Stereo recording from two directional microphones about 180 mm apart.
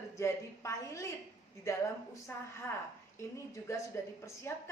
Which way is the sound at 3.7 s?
15° left (ahead or behind).